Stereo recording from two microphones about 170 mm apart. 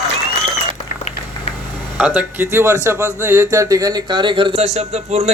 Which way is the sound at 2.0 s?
10° right (ahead or behind).